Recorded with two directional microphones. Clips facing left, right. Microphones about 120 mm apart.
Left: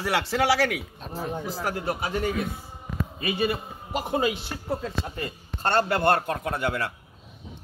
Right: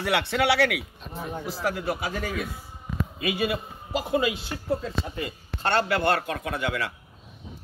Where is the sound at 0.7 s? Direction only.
40° left (ahead or behind).